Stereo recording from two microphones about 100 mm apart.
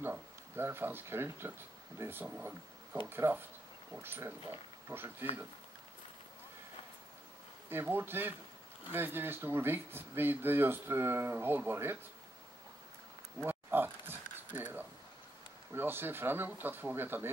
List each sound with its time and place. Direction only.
0.0 s speech: 20° right (ahead or behind)
2.2 s speech: 15° right (ahead or behind)
7.7 s speech: 20° right (ahead or behind)
13.4 s a sound: 20° right (ahead or behind)
15.7 s speech: 20° right (ahead or behind)